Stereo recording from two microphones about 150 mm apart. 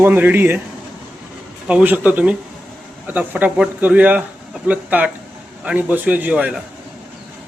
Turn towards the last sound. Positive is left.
turn(degrees=-5)  # may be behind; listen again after turning